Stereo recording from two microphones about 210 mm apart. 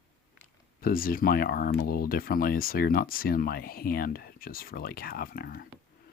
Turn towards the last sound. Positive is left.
turn(degrees=45)  # may be behind; listen again after turning